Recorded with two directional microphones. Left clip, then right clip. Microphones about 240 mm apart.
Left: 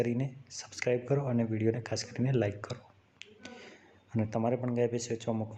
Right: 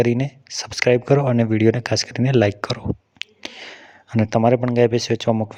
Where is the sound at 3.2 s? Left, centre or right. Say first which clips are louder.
Right 16 dB; right.